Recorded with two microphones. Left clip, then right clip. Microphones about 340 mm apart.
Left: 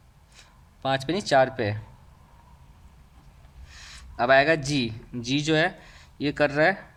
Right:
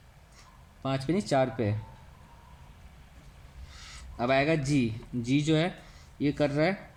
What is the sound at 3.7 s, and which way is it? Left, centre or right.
Speech, left.